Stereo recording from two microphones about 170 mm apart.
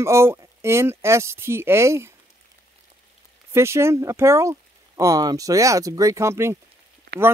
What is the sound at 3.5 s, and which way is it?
Speech, 15° right (ahead or behind).